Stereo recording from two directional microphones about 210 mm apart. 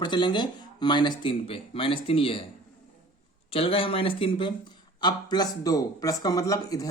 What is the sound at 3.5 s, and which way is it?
Speech, 25° left (ahead or behind).